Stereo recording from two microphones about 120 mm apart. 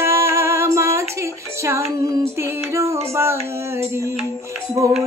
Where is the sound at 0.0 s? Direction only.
20° right (ahead or behind).